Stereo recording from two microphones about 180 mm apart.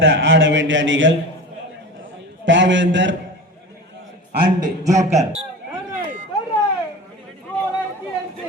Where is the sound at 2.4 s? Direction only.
90° right.